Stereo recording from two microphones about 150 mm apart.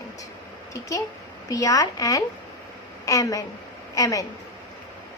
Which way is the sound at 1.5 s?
25° left (ahead or behind).